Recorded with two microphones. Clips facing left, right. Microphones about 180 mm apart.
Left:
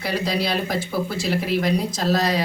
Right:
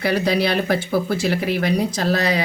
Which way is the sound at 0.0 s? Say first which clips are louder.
Right 5 dB; 60° right (ahead or behind).